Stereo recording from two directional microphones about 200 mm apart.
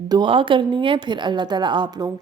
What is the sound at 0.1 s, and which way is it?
A woman's voice, 25° right (ahead or behind).